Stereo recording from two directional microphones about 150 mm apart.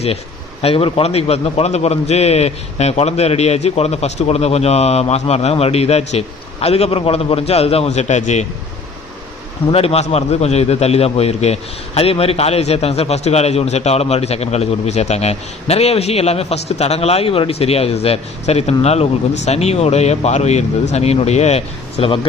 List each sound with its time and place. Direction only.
0.6 s a man's voice: 40° left (ahead or behind)
9.7 s a man's voice: 45° left (ahead or behind)